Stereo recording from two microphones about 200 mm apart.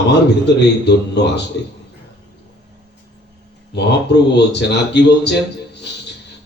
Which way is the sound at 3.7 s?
60° left (ahead or behind).